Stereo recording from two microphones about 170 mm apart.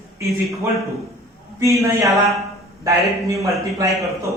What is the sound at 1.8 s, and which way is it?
Speech, 20° right (ahead or behind).